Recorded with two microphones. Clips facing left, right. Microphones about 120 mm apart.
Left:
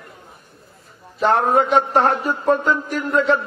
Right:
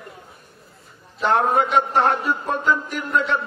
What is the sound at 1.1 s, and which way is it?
Speech, 30° left (ahead or behind).